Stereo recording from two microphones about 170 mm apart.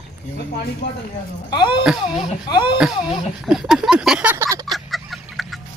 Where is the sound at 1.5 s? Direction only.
25° left (ahead or behind).